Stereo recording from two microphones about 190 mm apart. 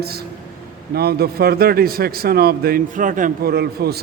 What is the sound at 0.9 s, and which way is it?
A man's voice, 55° right (ahead or behind).